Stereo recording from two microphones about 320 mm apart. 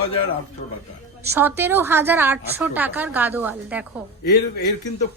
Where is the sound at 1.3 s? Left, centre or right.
Centre.